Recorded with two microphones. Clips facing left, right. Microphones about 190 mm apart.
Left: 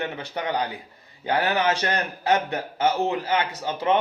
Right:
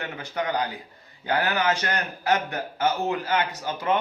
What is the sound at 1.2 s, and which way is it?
A man's voice, 25° left (ahead or behind).